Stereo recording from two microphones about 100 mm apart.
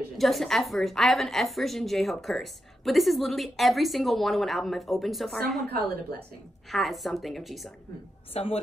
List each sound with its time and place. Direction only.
0.2 s a woman's voice: centre (ahead or behind)
6.7 s a woman's voice: centre (ahead or behind)
8.3 s a woman's voice: 85° left